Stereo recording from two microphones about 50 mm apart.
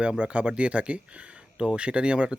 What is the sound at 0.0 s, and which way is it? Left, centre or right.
Speech, right.